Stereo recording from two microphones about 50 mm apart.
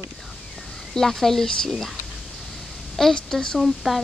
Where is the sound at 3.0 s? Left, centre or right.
Centre.